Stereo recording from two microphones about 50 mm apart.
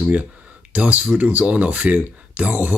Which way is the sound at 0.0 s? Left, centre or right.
Right.